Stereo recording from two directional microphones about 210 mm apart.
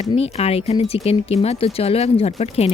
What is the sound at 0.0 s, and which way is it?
Speech, 30° left (ahead or behind).